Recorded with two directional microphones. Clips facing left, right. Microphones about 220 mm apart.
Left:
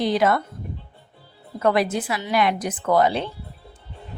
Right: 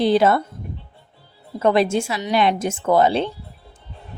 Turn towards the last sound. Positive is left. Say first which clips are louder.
# right 3 dB
turn(degrees=-30)  # may be behind; listen again after turning